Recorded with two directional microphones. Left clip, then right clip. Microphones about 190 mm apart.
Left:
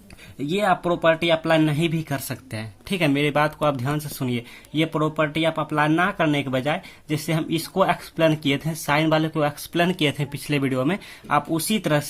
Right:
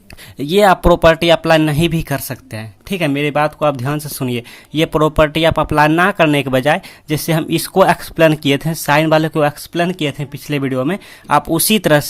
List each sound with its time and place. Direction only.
0.3 s speech: 35° right (ahead or behind)